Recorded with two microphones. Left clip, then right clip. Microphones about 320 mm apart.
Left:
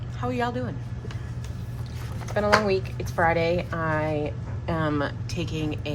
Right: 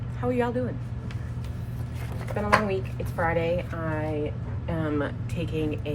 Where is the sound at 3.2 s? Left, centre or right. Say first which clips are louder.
Left 3 dB; centre.